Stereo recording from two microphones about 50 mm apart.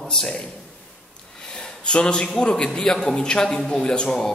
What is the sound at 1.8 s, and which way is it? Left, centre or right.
A man's voice, centre.